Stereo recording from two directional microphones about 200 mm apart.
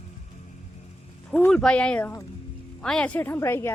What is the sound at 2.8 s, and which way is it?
Speech, 5° left (ahead or behind).